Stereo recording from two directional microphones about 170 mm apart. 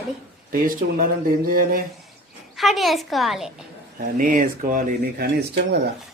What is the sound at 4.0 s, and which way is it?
Speech, 55° right (ahead or behind).